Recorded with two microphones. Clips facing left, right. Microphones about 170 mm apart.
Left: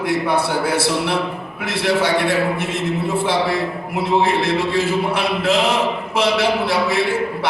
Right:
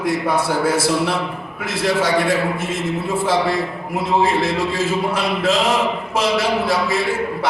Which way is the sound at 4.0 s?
65° left (ahead or behind).